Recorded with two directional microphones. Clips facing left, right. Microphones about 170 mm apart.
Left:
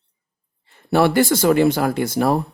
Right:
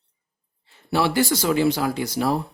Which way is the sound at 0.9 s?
55° left (ahead or behind).